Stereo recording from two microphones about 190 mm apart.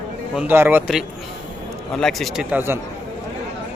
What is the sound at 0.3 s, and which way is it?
Speech, 10° right (ahead or behind).